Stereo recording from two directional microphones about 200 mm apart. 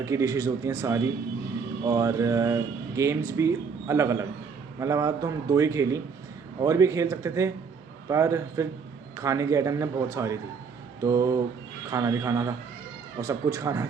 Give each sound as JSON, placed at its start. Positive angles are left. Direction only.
{"t": 0.0, "sound": "a man's voice", "side_deg": -15}